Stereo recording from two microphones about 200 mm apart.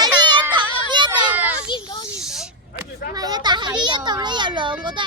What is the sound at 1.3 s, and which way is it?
Children playing, 10° right (ahead or behind).